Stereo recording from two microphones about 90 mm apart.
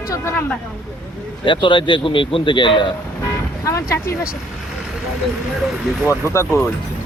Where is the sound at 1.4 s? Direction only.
65° left (ahead or behind).